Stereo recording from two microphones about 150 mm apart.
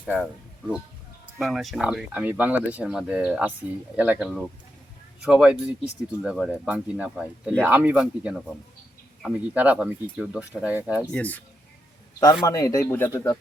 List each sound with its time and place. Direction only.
0.0 s speech: 10° right (ahead or behind)
1.4 s speech: centre (ahead or behind)
11.1 s speech: 10° left (ahead or behind)
12.2 s speech: 25° left (ahead or behind)